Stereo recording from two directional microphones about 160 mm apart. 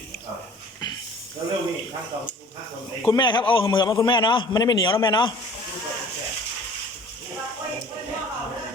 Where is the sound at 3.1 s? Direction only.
30° left (ahead or behind).